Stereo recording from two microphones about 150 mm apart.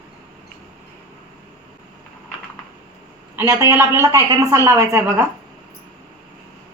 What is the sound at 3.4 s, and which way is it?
A woman's voice, 20° right (ahead or behind).